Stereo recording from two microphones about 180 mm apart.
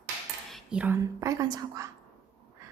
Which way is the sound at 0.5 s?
5° right (ahead or behind).